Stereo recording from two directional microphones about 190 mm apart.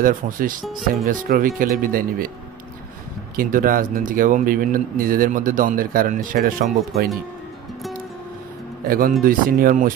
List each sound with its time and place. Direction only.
0.0 s speech: 45° right (ahead or behind)
3.3 s speech: 50° right (ahead or behind)
8.8 s speech: 50° right (ahead or behind)